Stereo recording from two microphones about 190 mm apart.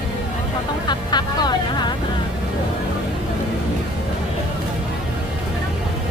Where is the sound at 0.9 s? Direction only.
25° left (ahead or behind).